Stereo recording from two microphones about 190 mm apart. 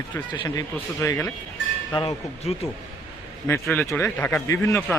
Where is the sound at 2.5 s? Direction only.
30° left (ahead or behind).